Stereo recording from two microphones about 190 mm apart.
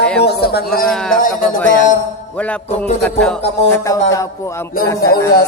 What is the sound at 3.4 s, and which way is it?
Music, 35° left (ahead or behind).